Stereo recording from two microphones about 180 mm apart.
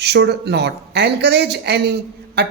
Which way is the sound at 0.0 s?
65° right (ahead or behind).